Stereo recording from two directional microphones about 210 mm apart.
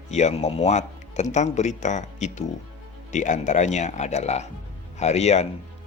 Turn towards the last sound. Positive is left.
turn(degrees=30)  # may be behind; listen again after turning